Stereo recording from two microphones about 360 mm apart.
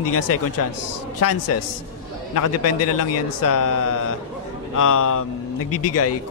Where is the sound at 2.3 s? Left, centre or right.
Left.